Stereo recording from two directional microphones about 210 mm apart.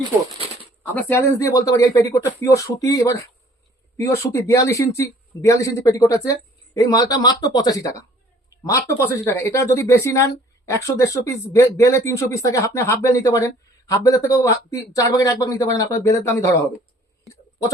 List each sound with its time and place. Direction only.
0.0 s bird: 25° right (ahead or behind)
0.8 s speech: 10° left (ahead or behind)